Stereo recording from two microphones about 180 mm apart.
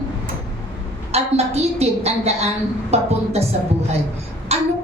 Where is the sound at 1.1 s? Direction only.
35° right (ahead or behind).